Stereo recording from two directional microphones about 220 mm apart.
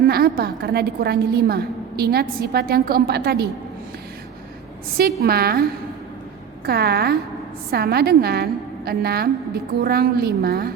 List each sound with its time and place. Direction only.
0.1 s a woman's voice: 45° right (ahead or behind)
5.2 s a woman's voice: 45° right (ahead or behind)
6.7 s a woman's voice: 45° right (ahead or behind)